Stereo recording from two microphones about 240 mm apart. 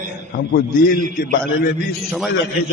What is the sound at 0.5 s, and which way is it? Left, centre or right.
A man's voice, left.